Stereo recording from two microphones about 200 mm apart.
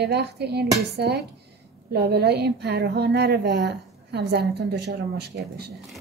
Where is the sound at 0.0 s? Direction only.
55° right (ahead or behind).